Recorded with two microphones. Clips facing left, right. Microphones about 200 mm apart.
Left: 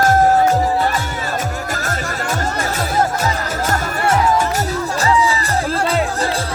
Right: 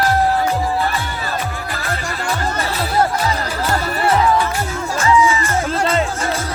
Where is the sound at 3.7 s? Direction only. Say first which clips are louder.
Right 1 dB; 45° left (ahead or behind).